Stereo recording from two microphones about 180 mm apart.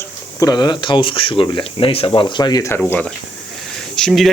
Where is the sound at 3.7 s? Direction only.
Centre (ahead or behind).